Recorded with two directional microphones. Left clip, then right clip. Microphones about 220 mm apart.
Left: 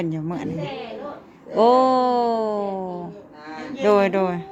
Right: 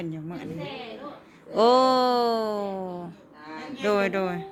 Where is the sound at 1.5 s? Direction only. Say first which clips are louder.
Left 3 dB; 5° right (ahead or behind).